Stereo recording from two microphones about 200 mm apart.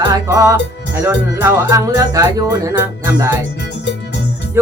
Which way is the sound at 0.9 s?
10° right (ahead or behind).